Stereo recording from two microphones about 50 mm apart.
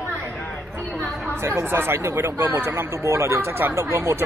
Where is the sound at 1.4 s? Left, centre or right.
Right.